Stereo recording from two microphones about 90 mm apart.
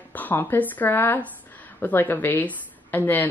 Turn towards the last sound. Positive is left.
turn(degrees=20)  # may be behind; listen again after turning